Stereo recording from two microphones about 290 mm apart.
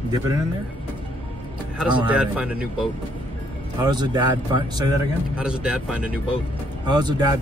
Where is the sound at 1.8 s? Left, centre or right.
Centre.